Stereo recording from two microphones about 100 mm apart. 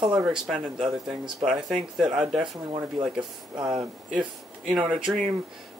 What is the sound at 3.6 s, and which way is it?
Speech, 5° right (ahead or behind).